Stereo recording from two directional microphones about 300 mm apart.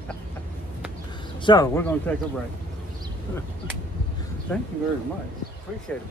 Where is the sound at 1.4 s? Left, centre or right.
Centre.